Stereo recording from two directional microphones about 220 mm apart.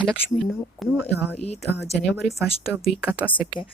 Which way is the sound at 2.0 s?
Centre (ahead or behind).